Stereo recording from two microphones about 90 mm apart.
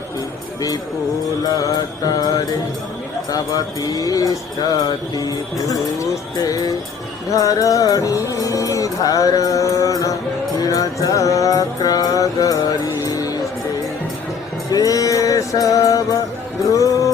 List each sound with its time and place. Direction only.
1.6 s speech: 45° left (ahead or behind)
3.2 s speech: 45° left (ahead or behind)
7.3 s music: 40° left (ahead or behind)
14.7 s music: 40° left (ahead or behind)